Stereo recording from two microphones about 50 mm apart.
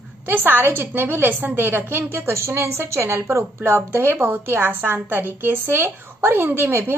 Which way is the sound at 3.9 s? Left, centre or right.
Right.